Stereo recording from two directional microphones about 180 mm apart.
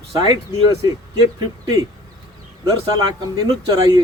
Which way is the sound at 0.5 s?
20° right (ahead or behind).